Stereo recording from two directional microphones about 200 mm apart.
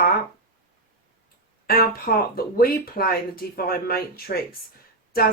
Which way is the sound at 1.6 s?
50° left (ahead or behind).